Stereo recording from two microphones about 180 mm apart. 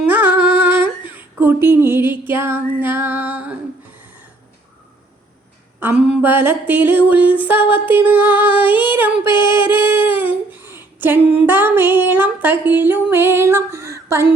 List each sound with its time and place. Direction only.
0.0 s female singing: 10° right (ahead or behind)
5.8 s a sound: 5° right (ahead or behind)
9.3 s music: 25° left (ahead or behind)
9.7 s humming: 10° right (ahead or behind)
10.2 s female singing: 10° right (ahead or behind)